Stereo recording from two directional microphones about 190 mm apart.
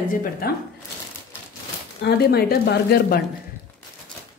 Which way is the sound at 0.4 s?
55° left (ahead or behind).